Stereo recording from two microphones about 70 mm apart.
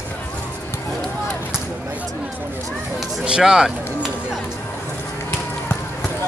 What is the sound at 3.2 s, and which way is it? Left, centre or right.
Speech, centre.